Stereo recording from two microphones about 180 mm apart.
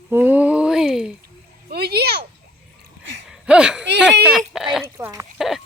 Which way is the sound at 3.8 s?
70° right (ahead or behind).